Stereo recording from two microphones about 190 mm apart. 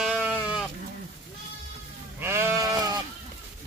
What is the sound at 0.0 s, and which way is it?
Sheep, 5° right (ahead or behind).